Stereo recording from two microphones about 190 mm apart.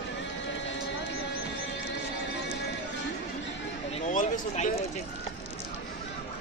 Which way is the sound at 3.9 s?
40° left (ahead or behind).